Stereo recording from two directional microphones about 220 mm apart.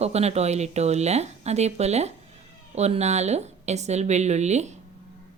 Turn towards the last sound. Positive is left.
turn(degrees=-30)  # may be behind; listen again after turning